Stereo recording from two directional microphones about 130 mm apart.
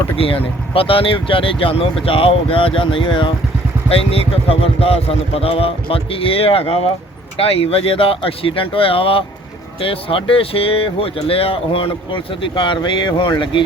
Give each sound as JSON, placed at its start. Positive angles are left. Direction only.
{"t": 0.2, "sound": "speech", "side_deg": 45}